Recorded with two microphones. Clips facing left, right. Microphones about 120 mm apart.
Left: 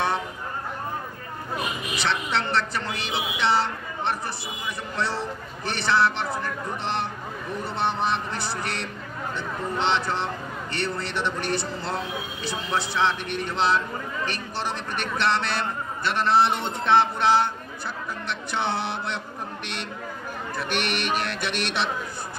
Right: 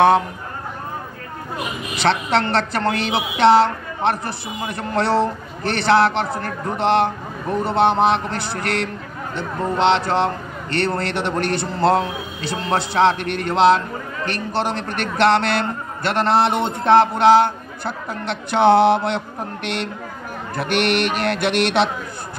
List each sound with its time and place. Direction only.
2.0 s a woman's voice: 70° right (ahead or behind)
12.4 s a man's voice: 65° right (ahead or behind)